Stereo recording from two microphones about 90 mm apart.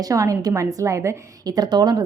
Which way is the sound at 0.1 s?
40° right (ahead or behind).